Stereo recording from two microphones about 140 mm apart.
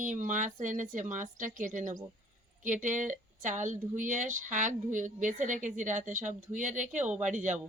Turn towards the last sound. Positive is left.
turn(degrees=-60)  # may be behind; listen again after turning